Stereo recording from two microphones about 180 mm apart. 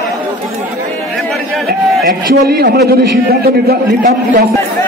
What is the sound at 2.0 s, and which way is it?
A man's voice, 65° right (ahead or behind).